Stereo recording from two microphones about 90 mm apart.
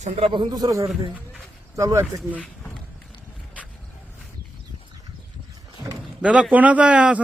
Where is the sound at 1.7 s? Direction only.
35° right (ahead or behind).